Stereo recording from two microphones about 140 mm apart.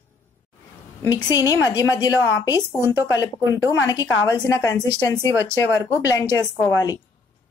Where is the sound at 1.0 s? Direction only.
25° left (ahead or behind).